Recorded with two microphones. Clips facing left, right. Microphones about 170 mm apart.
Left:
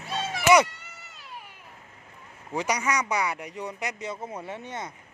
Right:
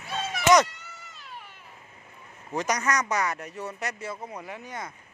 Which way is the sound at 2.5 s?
10° left (ahead or behind).